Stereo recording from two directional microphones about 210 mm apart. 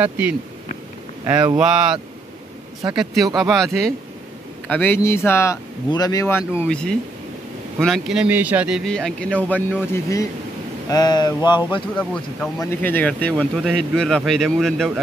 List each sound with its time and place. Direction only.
0.0 s speech: 5° right (ahead or behind)
1.2 s speech: 20° right (ahead or behind)
1.6 s speech: 5° right (ahead or behind)
3.3 s speech: centre (ahead or behind); by 11.5 s 20° left (ahead or behind)
12.0 s speech: 5° left (ahead or behind)